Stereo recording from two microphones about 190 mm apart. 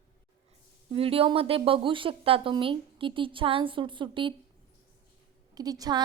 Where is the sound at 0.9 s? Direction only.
30° right (ahead or behind).